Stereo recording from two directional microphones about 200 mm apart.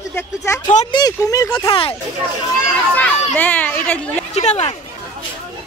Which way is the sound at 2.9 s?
10° left (ahead or behind).